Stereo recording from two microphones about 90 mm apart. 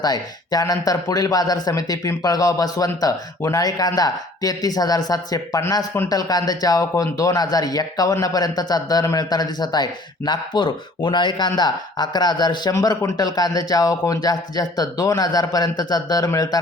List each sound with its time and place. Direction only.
0.0 s speech: 45° left (ahead or behind)